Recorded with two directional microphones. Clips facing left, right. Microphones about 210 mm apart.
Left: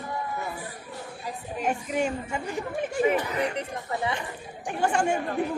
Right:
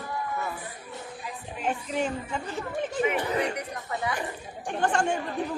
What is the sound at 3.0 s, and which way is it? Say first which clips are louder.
Speech: left 2 dB; 30° left (ahead or behind).